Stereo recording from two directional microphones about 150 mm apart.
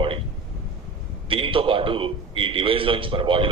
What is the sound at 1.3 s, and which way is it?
A man's voice, 35° right (ahead or behind).